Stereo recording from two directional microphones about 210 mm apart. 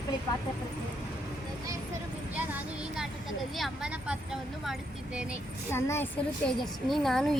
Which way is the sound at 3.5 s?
Centre (ahead or behind).